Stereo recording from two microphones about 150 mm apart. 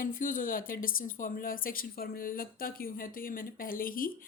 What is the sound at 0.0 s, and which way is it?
A woman's voice, 65° left (ahead or behind).